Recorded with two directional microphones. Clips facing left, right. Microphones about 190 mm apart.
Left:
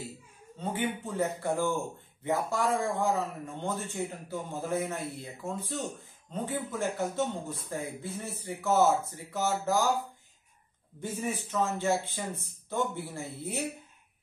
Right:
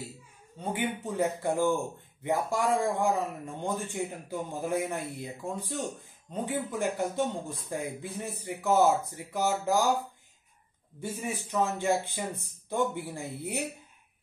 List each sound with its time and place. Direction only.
0.7 s a man's voice: 15° right (ahead or behind)
11.0 s a man's voice: 15° right (ahead or behind)